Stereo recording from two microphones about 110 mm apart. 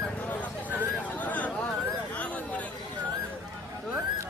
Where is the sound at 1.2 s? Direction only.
15° left (ahead or behind).